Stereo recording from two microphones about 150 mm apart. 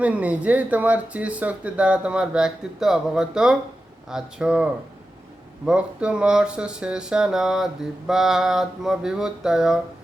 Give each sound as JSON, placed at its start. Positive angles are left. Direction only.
{"t": 0.0, "sound": "speech", "side_deg": -10}